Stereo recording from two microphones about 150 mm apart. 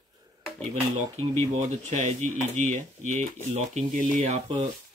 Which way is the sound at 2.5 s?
55° right (ahead or behind).